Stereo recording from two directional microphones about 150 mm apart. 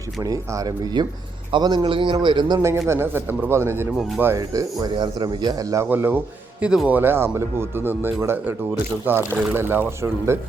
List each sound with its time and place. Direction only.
0.2 s a man's voice: 25° right (ahead or behind)
2.8 s speech: 15° right (ahead or behind)